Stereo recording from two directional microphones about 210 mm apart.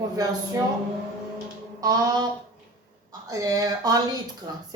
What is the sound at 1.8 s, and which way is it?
Speech, 20° right (ahead or behind).